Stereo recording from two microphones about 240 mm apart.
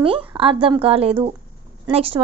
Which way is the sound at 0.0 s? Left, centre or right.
Right.